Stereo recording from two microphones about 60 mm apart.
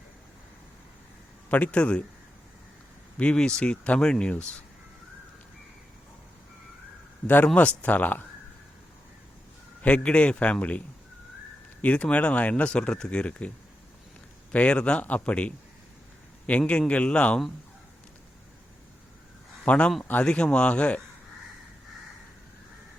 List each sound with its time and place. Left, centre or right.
1.5 s speech: left
3.2 s speech: centre
7.4 s speech: left
9.8 s speech: centre
14.5 s speech: centre
19.6 s speech: centre